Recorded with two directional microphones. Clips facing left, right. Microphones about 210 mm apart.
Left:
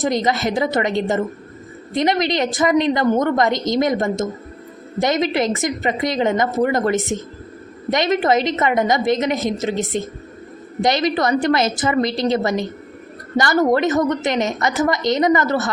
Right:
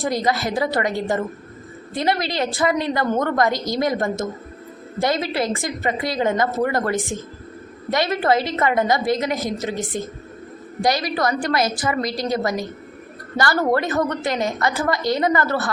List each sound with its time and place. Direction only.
0.0 s a woman's voice: 20° left (ahead or behind)